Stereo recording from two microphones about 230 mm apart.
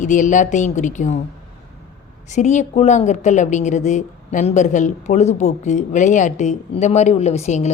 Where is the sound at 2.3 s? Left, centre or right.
Left.